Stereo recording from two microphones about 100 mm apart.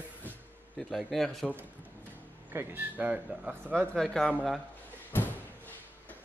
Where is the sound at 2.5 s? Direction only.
20° right (ahead or behind).